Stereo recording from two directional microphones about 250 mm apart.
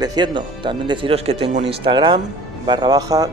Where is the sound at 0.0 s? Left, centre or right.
Centre.